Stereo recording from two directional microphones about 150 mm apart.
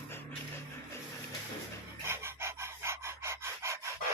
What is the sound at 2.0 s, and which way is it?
Pant, 15° right (ahead or behind).